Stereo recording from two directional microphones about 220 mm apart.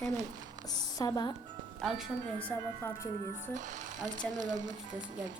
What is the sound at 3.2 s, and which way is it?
Speech, 35° right (ahead or behind).